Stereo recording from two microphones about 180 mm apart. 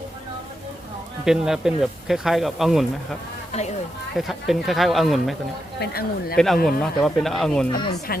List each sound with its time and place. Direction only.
1.2 s speech: 5° right (ahead or behind)
4.2 s speech: centre (ahead or behind)
5.8 s speech: 60° left (ahead or behind)
6.3 s speech: centre (ahead or behind)